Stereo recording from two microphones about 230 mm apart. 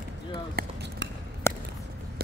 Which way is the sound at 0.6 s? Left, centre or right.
Right.